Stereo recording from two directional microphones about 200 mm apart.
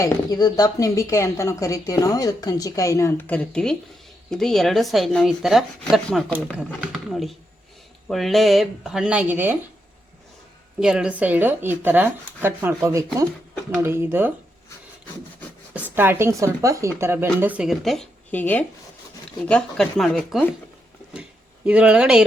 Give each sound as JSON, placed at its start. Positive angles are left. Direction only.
{"t": 0.0, "sound": "speech", "side_deg": 20}
{"t": 10.8, "sound": "speech", "side_deg": -5}
{"t": 16.0, "sound": "speech", "side_deg": -10}
{"t": 21.1, "sound": "a sound", "side_deg": -5}